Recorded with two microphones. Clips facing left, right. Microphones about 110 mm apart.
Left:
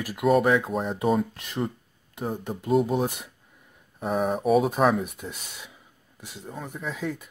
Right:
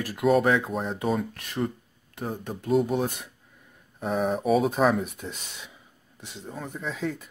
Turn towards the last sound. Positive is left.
turn(degrees=10)  # may be behind; listen again after turning